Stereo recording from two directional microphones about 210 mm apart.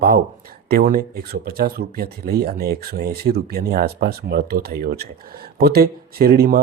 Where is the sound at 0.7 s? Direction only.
45° right (ahead or behind).